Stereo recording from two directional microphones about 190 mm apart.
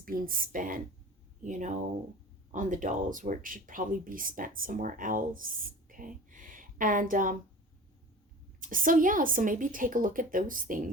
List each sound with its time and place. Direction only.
0.0 s speech: 50° right (ahead or behind)
8.6 s speech: 45° right (ahead or behind)